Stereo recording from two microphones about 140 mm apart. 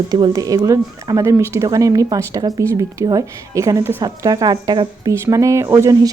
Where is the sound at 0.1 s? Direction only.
30° right (ahead or behind).